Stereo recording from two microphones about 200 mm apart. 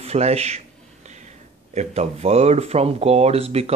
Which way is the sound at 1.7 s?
30° right (ahead or behind).